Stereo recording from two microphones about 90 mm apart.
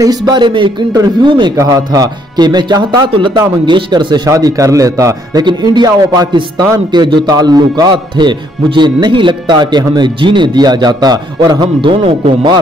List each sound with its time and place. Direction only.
0.0 s speech: 45° right (ahead or behind); by 1.5 s 65° right (ahead or behind)
1.6 s speech: 40° right (ahead or behind); by 4.2 s 55° right (ahead or behind)
4.3 s speech: 40° right (ahead or behind)
5.4 s speech: 55° right (ahead or behind)
11.8 s speech: 70° right (ahead or behind)